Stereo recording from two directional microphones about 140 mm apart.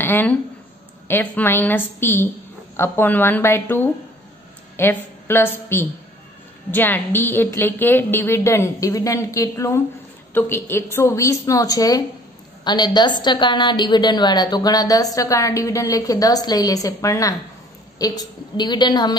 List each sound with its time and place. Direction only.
0.0 s a woman's voice: 15° left (ahead or behind); by 19.1 s 30° left (ahead or behind)